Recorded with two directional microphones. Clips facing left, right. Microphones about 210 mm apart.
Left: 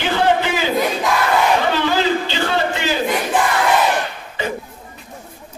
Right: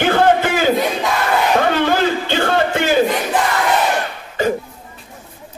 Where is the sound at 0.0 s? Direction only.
50° right (ahead or behind).